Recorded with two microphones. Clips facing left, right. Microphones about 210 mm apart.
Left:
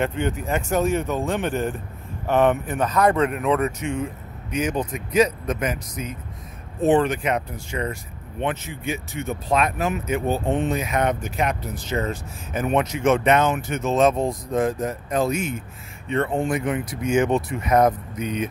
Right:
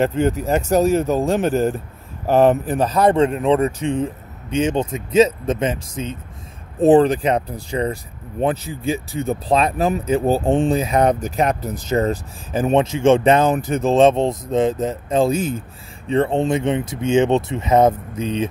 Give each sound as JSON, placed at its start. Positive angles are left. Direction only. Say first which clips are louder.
{"t": 0.0, "sound": "speech", "louder": "right 6 dB", "side_deg": -40}